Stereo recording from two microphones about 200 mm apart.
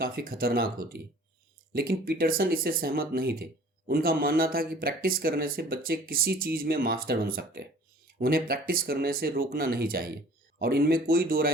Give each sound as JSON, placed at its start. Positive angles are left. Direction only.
{"t": 0.0, "sound": "speech", "side_deg": -50}